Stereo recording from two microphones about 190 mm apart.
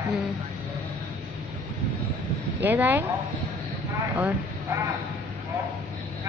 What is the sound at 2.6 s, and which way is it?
Speech, 10° right (ahead or behind).